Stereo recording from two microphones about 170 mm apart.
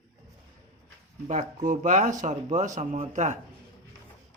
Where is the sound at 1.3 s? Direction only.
45° right (ahead or behind).